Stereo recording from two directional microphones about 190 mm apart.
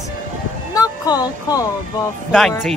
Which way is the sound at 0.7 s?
20° left (ahead or behind).